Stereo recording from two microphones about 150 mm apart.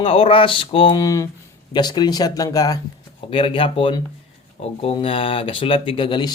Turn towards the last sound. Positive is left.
turn(degrees=30)  # may be behind; listen again after turning